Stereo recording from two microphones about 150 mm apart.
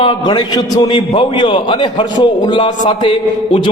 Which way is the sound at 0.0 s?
30° left (ahead or behind).